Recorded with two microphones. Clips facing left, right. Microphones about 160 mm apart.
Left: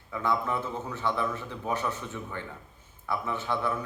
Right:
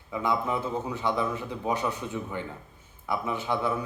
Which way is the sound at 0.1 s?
15° right (ahead or behind).